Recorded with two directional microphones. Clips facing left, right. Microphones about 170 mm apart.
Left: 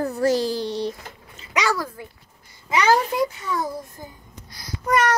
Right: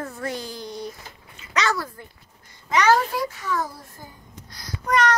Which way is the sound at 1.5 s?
10° left (ahead or behind).